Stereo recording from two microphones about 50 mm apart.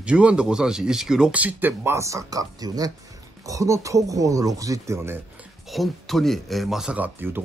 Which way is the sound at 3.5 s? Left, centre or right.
Right.